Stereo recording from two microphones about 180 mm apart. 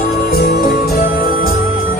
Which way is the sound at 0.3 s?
55° left (ahead or behind).